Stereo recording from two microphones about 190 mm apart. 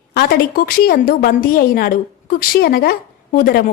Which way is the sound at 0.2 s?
55° left (ahead or behind).